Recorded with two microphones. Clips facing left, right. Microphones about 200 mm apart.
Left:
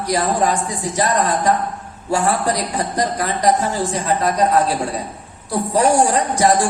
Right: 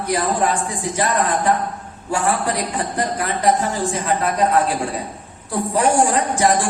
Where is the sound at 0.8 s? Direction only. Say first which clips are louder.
Left 2 dB; 40° left (ahead or behind).